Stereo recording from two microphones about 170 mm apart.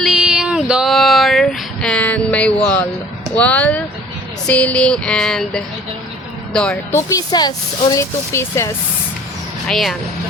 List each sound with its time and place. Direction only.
0.0 s a sound: centre (ahead or behind)
3.3 s speech: 10° left (ahead or behind)
4.4 s music: 5° left (ahead or behind)
6.5 s speech: 5° left (ahead or behind)
6.9 s speech: 20° left (ahead or behind)
9.6 s music: centre (ahead or behind)